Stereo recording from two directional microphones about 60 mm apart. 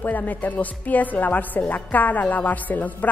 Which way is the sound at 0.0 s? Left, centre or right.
Left.